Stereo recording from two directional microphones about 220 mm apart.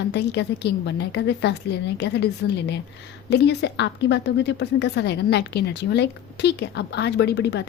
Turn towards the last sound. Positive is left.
turn(degrees=50)  # may be behind; listen again after turning